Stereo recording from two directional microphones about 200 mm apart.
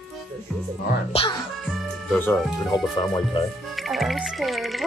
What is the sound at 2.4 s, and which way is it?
Speech, centre (ahead or behind).